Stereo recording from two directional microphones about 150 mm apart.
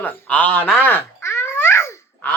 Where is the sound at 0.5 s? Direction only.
10° left (ahead or behind).